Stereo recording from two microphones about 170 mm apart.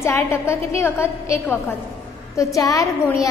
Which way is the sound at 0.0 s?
15° left (ahead or behind).